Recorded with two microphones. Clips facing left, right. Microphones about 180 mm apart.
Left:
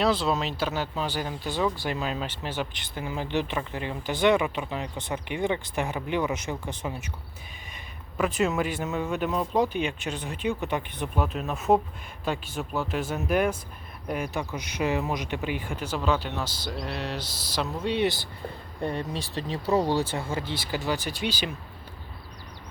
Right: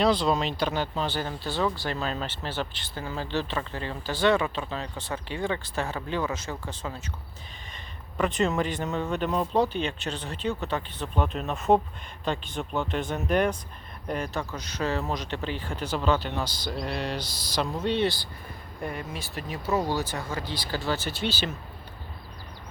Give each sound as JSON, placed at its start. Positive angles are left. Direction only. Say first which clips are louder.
{"t": 0.0, "sound": "speech", "louder": "right 1 dB", "side_deg": 5}
{"t": 8.2, "sound": "speech", "louder": "even", "side_deg": 5}
{"t": 18.8, "sound": "speech", "louder": "left 4 dB", "side_deg": 30}